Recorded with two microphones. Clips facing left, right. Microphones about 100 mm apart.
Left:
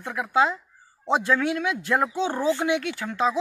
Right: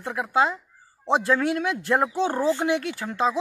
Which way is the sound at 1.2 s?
40° right (ahead or behind).